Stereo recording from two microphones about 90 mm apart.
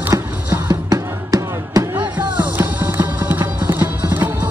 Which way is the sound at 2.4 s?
20° right (ahead or behind).